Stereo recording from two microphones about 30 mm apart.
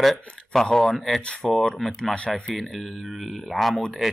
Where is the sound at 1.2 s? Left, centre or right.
Left.